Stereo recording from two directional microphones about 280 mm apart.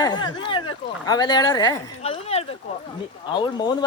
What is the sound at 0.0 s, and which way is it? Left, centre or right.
Speech, centre.